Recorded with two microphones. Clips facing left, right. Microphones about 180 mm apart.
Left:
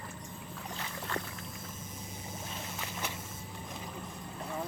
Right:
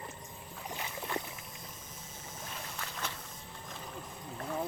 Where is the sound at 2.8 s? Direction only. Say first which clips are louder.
Left 1 dB; 15° left (ahead or behind).